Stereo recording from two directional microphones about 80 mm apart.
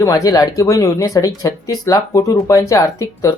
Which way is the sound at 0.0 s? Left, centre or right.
Left.